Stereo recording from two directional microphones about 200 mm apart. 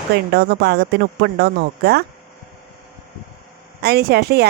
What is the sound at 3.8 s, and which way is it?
Speech, 55° right (ahead or behind).